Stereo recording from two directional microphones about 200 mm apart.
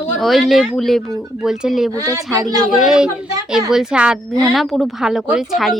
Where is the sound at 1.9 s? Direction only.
15° right (ahead or behind).